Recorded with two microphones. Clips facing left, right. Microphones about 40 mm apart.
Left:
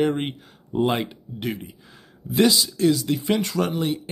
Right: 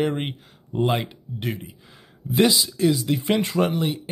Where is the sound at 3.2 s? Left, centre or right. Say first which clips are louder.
Right 2 dB; right.